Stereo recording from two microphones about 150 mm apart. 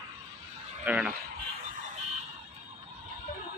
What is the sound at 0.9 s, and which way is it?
Speech, 10° right (ahead or behind).